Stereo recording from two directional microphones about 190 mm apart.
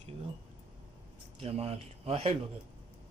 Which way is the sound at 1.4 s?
30° right (ahead or behind).